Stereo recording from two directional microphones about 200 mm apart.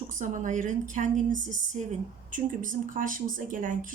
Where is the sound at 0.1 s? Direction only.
40° right (ahead or behind).